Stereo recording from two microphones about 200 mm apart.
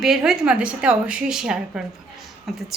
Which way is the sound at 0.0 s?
Centre (ahead or behind).